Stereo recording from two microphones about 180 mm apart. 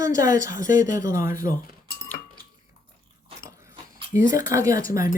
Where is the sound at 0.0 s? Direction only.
20° right (ahead or behind).